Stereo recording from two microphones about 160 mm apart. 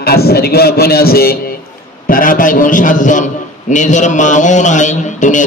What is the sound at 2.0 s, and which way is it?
A man's voice, 60° left (ahead or behind).